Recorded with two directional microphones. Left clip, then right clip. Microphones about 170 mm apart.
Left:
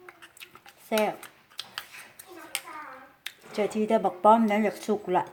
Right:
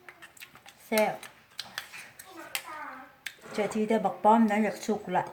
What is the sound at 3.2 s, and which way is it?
Speech, 35° left (ahead or behind).